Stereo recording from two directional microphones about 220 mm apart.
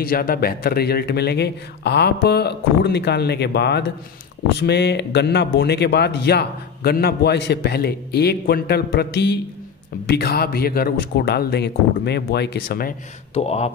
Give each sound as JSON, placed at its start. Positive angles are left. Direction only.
{"t": 0.0, "sound": "speech", "side_deg": 40}
{"t": 13.3, "sound": "speech", "side_deg": 30}